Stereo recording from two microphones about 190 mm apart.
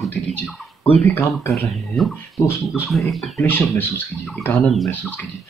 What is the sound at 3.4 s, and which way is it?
Speech, 10° left (ahead or behind).